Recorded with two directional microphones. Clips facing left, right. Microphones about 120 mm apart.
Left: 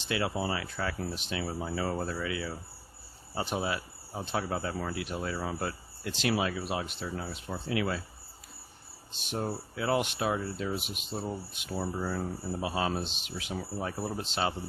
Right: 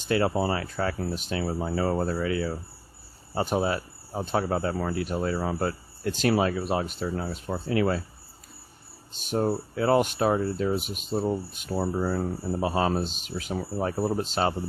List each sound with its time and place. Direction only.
0.0 s speech: 45° right (ahead or behind)
9.1 s speech: 45° right (ahead or behind)